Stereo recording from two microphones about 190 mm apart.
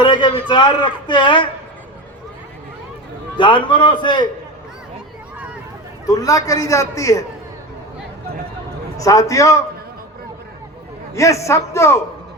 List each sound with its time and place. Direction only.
0.0 s a man's voice: 25° left (ahead or behind)
3.3 s a man's voice: 25° left (ahead or behind)
6.1 s a man's voice: 20° left (ahead or behind)
9.0 s a man's voice: 15° left (ahead or behind)
11.1 s a man's voice: 15° left (ahead or behind)